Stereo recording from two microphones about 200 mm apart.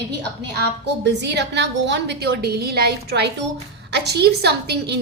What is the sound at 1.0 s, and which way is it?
A woman's voice, 60° right (ahead or behind).